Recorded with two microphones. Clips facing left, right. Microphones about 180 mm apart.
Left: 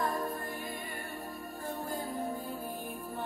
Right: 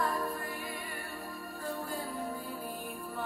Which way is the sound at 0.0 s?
20° left (ahead or behind).